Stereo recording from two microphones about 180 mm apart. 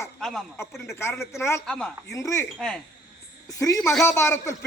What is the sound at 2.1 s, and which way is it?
Speech, 15° left (ahead or behind).